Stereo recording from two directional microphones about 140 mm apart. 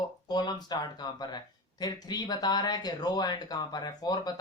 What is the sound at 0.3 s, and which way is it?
Speech, 30° left (ahead or behind).